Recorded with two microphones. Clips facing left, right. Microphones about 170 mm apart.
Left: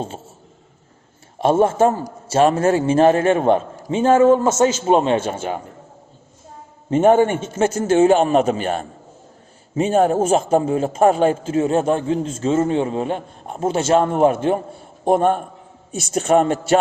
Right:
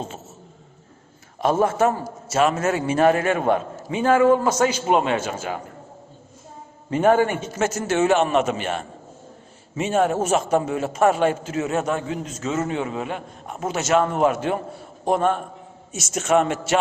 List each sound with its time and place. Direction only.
1.4 s a man's voice: 25° left (ahead or behind)
6.9 s a man's voice: 25° left (ahead or behind)